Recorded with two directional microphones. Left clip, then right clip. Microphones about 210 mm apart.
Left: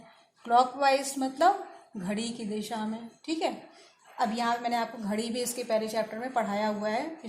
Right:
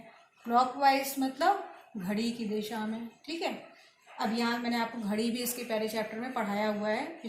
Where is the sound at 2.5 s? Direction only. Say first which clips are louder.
Left 1 dB; 45° left (ahead or behind).